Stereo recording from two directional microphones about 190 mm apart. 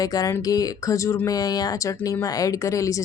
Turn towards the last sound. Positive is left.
turn(degrees=15)  # may be behind; listen again after turning